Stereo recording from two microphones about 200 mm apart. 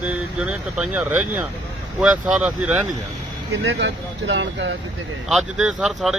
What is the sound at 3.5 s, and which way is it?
Speech, 70° right (ahead or behind).